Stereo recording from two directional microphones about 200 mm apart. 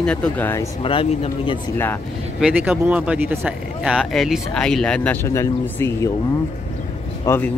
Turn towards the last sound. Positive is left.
turn(degrees=15)  # may be behind; listen again after turning